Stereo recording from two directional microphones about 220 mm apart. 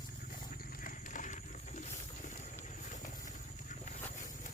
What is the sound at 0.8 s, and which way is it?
Horse, 35° left (ahead or behind).